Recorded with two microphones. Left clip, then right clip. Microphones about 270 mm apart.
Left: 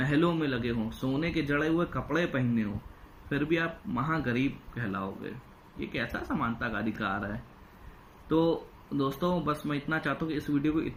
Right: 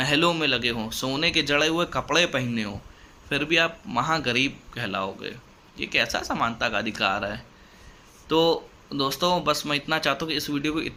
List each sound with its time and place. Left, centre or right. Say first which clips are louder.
0.2 s speech: right 7 dB; centre
4.2 s speech: right 7 dB; right
4.8 s speech: right 7 dB; centre
10.2 s speech: right 4 dB; right